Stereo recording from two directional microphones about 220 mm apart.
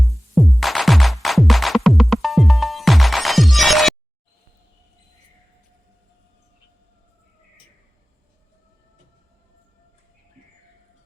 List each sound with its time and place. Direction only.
0.0 s music: centre (ahead or behind)